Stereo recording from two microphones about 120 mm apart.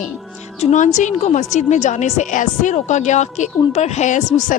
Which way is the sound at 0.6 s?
80° left.